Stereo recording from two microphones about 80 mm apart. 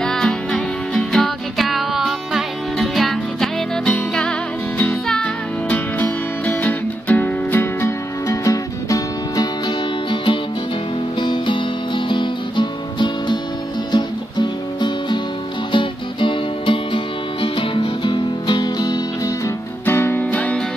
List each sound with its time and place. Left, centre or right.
0.0 s music: centre
5.7 s music: left
8.3 s music: left
10.0 s music: left
15.7 s music: left
19.9 s music: left